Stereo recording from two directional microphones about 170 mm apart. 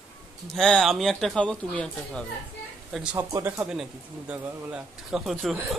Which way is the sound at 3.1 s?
15° right (ahead or behind).